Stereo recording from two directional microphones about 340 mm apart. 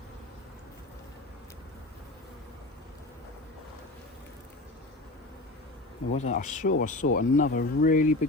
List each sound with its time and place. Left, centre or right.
6.1 s speech: left